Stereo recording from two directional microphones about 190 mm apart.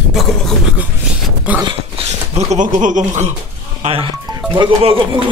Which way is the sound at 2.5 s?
40° right (ahead or behind).